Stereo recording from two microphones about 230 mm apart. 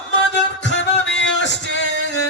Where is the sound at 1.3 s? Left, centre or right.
Left.